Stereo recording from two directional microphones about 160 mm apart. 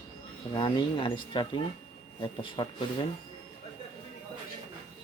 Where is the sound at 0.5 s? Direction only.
30° left (ahead or behind).